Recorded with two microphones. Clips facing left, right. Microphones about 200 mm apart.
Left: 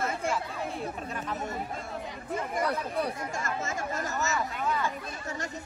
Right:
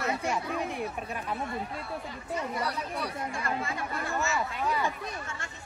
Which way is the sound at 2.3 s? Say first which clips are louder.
Left 2 dB; 50° left (ahead or behind).